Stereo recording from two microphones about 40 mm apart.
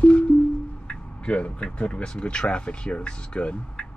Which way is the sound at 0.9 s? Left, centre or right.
Left.